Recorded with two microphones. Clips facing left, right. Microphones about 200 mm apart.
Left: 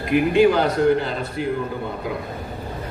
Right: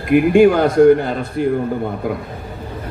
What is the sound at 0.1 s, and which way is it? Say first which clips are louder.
A man's voice: right 5 dB; 50° right (ahead or behind).